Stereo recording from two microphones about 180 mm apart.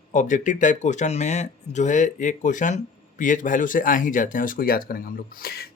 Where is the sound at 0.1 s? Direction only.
45° left (ahead or behind).